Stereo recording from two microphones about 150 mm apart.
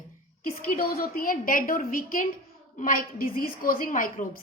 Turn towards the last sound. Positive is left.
turn(degrees=65)  # may be behind; listen again after turning